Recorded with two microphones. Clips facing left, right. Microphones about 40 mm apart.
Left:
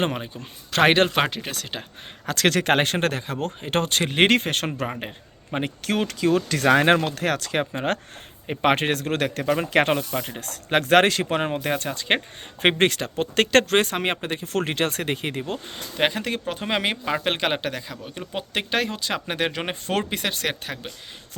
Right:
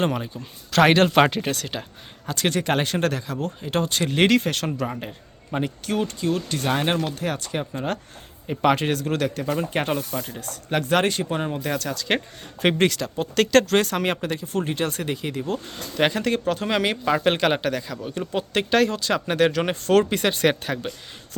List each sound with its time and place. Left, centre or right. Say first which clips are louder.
0.0 s speech: right 1 dB; left
1.1 s speech: right 5 dB; centre
2.2 s speech: left 3 dB; left
4.1 s speech: even; left
5.8 s speech: left 3 dB; left
6.7 s speech: left 6 dB; left
8.4 s speech: even; left
9.6 s speech: left 4 dB; left
11.7 s speech: right 1 dB; left
13.9 s speech: right 1 dB; left
14.4 s speech: left 3 dB; left
15.5 s speech: right 3 dB; centre